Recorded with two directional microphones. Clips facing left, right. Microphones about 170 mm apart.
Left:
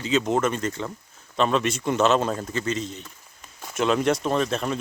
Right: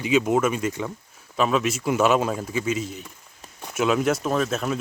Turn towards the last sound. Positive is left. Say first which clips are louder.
# even
turn(degrees=-5)  # may be behind; listen again after turning